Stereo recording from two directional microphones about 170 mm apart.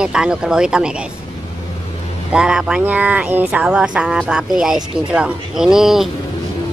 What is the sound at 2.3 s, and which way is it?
Speech, 5° right (ahead or behind).